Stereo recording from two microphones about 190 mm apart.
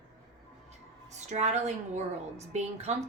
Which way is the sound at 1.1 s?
35° right (ahead or behind).